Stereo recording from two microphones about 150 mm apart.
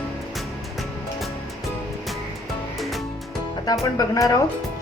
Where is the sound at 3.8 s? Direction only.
20° left (ahead or behind).